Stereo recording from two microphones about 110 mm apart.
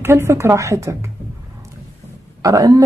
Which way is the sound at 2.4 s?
30° right (ahead or behind).